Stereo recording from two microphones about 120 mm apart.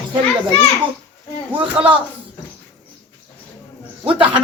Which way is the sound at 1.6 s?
10° right (ahead or behind).